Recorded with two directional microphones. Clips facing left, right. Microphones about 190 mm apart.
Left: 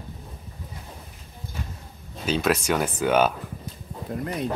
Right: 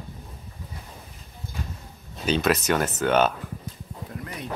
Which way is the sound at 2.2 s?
5° left (ahead or behind).